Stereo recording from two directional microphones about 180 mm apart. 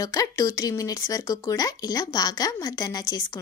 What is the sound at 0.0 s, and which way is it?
Speech, 20° left (ahead or behind).